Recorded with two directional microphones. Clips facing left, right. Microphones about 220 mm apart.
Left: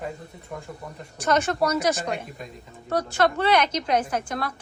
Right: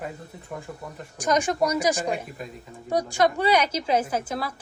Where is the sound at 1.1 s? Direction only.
15° right (ahead or behind).